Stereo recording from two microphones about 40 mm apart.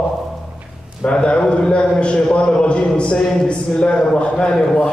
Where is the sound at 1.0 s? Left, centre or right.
Left.